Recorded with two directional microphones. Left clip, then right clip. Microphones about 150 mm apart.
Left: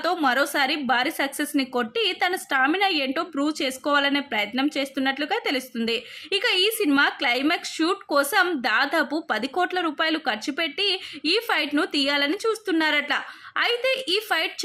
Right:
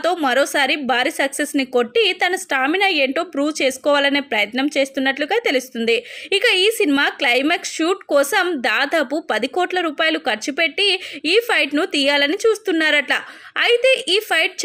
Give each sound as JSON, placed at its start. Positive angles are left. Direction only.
{"t": 0.0, "sound": "a woman's voice", "side_deg": -15}